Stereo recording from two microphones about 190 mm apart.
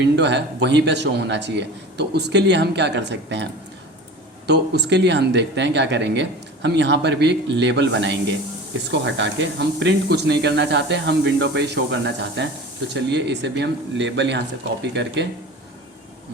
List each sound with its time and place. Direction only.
0.0 s speech: 65° right (ahead or behind)
4.4 s speech: 65° right (ahead or behind)